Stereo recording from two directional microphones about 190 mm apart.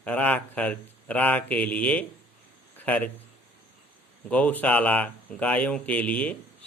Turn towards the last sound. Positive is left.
turn(degrees=5)  # may be behind; listen again after turning